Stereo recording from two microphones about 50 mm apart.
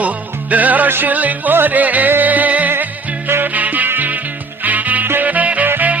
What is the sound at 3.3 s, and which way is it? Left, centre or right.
Music, right.